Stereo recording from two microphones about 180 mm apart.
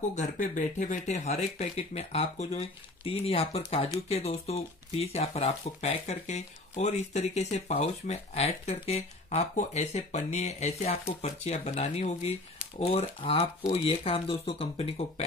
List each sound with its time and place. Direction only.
0.1 s speech: 45° left (ahead or behind)